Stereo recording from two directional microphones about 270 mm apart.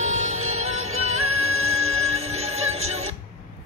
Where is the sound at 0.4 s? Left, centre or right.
Right.